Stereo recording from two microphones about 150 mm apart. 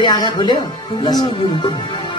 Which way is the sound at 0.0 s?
30° left (ahead or behind).